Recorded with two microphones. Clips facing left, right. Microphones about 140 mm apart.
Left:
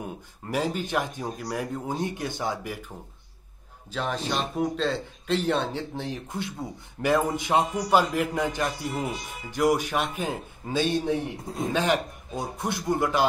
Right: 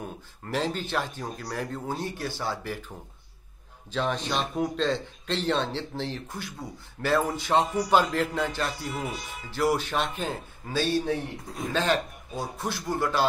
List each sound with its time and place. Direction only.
0.5 s speech: 10° left (ahead or behind)
3.9 s speech: 5° left (ahead or behind)
8.8 s speech: centre (ahead or behind)
9.5 s a man's voice: 15° left (ahead or behind)